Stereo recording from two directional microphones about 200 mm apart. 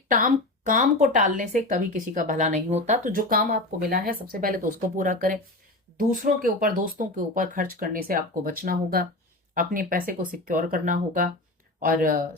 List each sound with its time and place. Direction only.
0.1 s a woman's voice: 40° right (ahead or behind)